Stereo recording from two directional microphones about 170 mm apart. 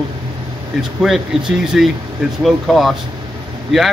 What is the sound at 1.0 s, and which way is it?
A man's voice, 5° right (ahead or behind).